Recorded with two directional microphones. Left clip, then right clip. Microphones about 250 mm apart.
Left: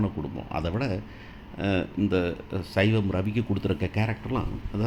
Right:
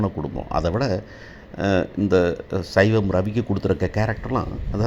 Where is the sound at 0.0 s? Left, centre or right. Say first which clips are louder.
Right 6 dB; centre.